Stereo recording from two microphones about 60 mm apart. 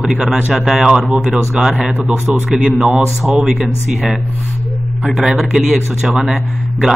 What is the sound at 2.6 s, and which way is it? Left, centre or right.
A man's voice, centre.